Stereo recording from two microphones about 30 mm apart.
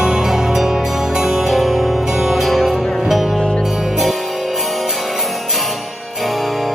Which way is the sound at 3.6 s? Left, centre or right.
Right.